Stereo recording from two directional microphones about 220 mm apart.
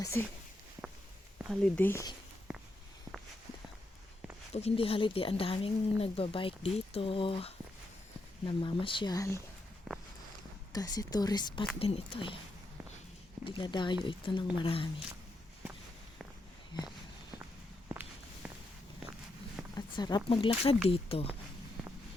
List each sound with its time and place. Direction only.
0.0 s a woman's voice: 10° left (ahead or behind)
1.4 s a woman's voice: centre (ahead or behind)
4.5 s speech: 25° left (ahead or behind)
10.7 s a woman's voice: 15° left (ahead or behind)
13.4 s speech: 20° left (ahead or behind)
16.7 s speech: 20° left (ahead or behind)
18.4 s walk: 5° right (ahead or behind)
19.7 s speech: 20° left (ahead or behind)